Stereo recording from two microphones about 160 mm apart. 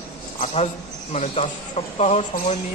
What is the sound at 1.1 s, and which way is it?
A man's voice, 40° left (ahead or behind).